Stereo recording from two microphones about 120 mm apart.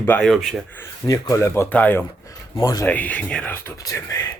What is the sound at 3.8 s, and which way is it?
Speech, 30° left (ahead or behind).